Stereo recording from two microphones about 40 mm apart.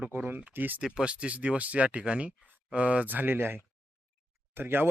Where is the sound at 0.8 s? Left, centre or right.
Centre.